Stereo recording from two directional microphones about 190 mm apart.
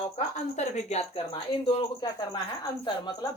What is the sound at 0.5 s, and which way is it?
Speech, 35° left (ahead or behind).